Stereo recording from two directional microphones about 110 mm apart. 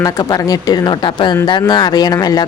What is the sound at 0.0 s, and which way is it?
Speech, 35° left (ahead or behind).